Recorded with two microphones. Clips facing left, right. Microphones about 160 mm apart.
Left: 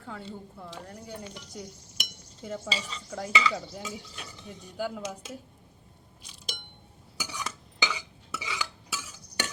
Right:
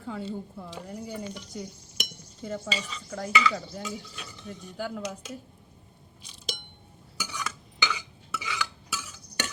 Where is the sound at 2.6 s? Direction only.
30° left (ahead or behind).